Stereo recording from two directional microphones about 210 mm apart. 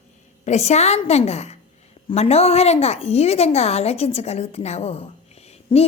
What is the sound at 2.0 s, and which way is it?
A woman's voice, 30° left (ahead or behind).